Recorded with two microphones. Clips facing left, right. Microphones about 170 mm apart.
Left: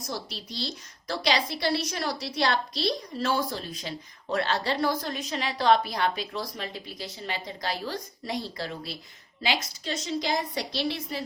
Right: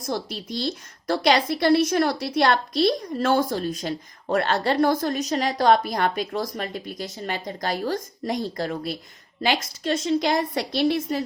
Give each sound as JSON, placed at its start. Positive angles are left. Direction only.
{"t": 0.1, "sound": "a woman's voice", "side_deg": -50}